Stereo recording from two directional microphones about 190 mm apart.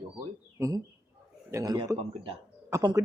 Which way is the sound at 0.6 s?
15° right (ahead or behind).